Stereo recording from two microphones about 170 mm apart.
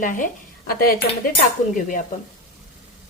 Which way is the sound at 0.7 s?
65° left (ahead or behind).